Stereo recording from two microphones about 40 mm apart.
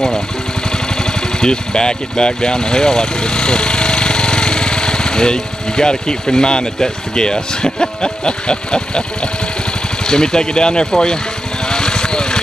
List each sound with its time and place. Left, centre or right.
1.0 s speech: centre
11.6 s vehicle: centre